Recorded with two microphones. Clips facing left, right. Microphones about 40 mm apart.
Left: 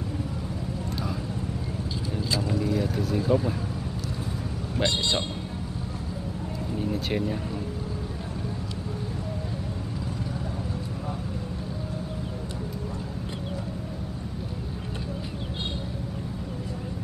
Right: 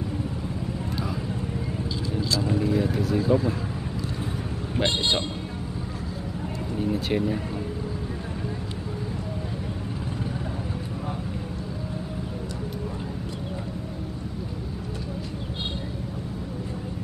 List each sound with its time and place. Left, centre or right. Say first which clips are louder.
2.5 s speech: right 4 dB; centre
3.3 s speech: right 1 dB; centre
6.8 s speech: right 3 dB; centre